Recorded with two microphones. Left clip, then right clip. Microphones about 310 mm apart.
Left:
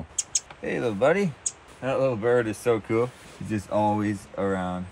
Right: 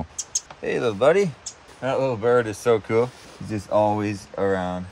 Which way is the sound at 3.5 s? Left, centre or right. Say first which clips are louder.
Right 4 dB; centre.